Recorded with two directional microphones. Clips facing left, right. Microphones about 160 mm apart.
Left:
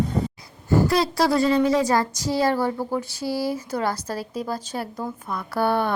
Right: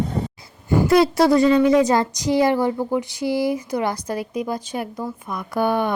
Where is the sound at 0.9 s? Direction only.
25° right (ahead or behind).